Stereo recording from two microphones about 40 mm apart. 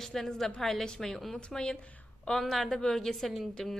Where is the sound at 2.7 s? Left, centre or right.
Centre.